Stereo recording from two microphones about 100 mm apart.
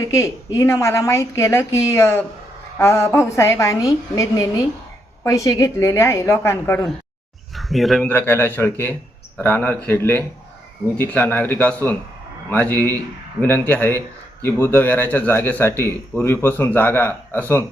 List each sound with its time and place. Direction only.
0.0 s a woman's voice: 30° left (ahead or behind)
7.5 s a sound: centre (ahead or behind)
8.0 s speech: 20° left (ahead or behind)